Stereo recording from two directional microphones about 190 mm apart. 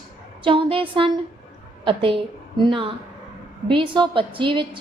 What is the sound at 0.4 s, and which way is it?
A woman's voice, 25° right (ahead or behind).